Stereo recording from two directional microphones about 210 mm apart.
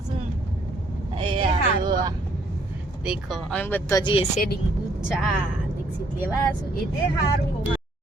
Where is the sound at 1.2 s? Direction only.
25° right (ahead or behind).